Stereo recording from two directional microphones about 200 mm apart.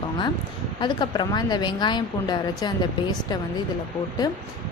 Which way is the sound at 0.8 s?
20° left (ahead or behind).